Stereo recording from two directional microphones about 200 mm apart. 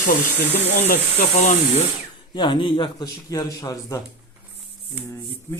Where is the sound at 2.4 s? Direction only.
25° left (ahead or behind).